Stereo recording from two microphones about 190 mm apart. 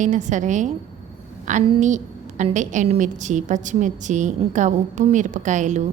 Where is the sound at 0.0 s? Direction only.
40° right (ahead or behind).